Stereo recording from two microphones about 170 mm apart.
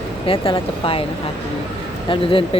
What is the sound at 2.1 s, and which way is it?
Speech, 30° left (ahead or behind).